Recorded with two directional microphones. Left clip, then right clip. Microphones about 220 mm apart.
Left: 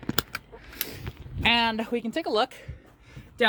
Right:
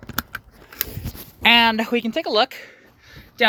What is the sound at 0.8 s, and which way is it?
Goat, 55° right (ahead or behind).